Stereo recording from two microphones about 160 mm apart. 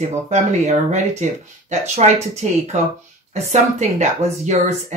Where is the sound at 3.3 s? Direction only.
45° right (ahead or behind).